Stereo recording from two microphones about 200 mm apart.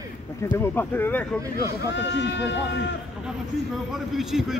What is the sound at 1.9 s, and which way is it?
Speech, 65° left (ahead or behind).